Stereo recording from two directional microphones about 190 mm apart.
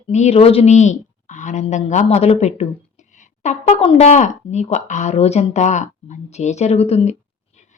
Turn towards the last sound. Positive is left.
turn(degrees=35)  # may be behind; listen again after turning